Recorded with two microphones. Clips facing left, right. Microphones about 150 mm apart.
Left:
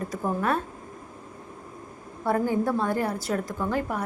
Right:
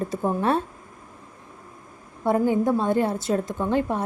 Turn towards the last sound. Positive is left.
turn(degrees=-25)  # may be behind; listen again after turning